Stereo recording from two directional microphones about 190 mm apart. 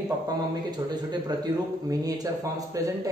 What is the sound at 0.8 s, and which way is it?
A man's voice, 20° right (ahead or behind).